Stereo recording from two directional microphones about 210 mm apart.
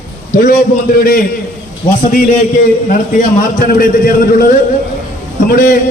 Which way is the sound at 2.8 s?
40° left (ahead or behind).